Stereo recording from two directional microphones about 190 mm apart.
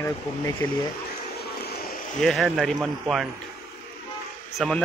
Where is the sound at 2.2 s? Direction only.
Centre (ahead or behind).